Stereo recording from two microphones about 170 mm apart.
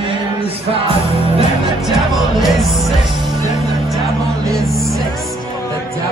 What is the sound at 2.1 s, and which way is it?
Music, centre (ahead or behind).